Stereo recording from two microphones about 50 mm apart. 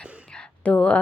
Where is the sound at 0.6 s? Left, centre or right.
Left.